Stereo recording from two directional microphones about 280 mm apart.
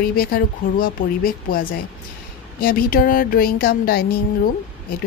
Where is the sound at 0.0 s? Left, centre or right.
Left.